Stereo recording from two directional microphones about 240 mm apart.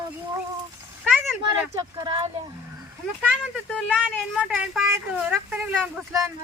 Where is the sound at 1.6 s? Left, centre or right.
Centre.